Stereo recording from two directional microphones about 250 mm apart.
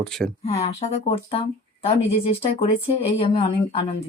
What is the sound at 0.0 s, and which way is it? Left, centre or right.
Speech, centre.